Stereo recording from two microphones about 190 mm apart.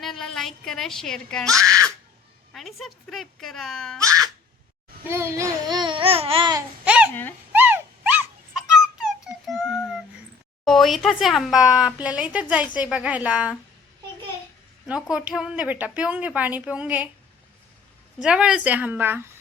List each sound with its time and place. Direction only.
0.0 s speech: centre (ahead or behind)
1.5 s a woman's voice: 15° right (ahead or behind)
2.5 s speech: centre (ahead or behind)
5.0 s speech: 15° right (ahead or behind)
6.8 s babbling: 5° right (ahead or behind)
7.1 s speech: 10° left (ahead or behind)
7.5 s a sound: 10° right (ahead or behind)
10.7 s speech: centre (ahead or behind)
15.1 s a woman's voice: 5° right (ahead or behind)
18.2 s a woman's voice: 5° right (ahead or behind)